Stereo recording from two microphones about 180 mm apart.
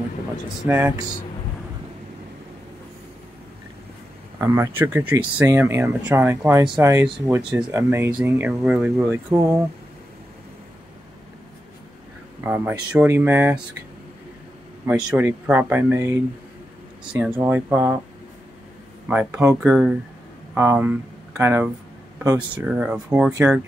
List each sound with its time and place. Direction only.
0.7 s speech: 10° right (ahead or behind)
4.4 s speech: 15° right (ahead or behind)
12.4 s speech: 10° right (ahead or behind)
14.9 s speech: 10° right (ahead or behind)
19.0 s speech: 5° right (ahead or behind)
22.7 s speech: 5° right (ahead or behind)